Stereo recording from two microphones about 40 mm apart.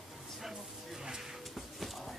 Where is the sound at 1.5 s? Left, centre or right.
Centre.